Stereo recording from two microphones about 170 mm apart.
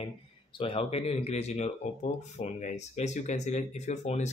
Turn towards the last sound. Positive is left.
turn(degrees=45)  # may be behind; listen again after turning